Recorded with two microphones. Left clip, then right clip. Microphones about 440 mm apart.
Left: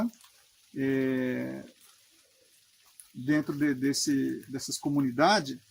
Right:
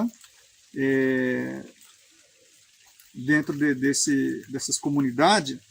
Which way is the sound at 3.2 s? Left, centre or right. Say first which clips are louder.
Right 5 dB; left.